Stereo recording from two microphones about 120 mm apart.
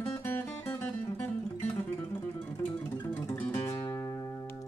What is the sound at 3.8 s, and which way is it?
Music, 30° left (ahead or behind).